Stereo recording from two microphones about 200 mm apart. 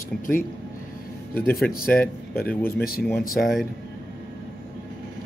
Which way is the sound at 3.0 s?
Centre (ahead or behind).